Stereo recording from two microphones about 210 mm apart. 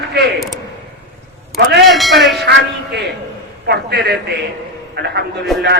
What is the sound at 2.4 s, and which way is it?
A man's voice, 50° right (ahead or behind).